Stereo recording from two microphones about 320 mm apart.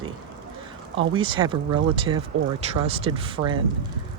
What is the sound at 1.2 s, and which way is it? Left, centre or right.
Speech, centre.